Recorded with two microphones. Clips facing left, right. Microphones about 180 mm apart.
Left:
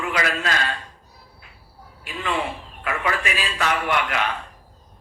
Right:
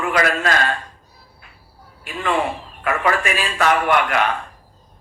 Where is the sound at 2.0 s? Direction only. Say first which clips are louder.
Right 5 dB; 50° right (ahead or behind).